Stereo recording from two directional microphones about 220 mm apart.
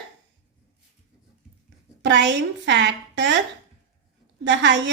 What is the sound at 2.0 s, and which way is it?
A woman's voice, 55° right (ahead or behind).